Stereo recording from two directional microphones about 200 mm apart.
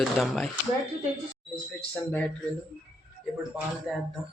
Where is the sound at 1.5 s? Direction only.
10° left (ahead or behind).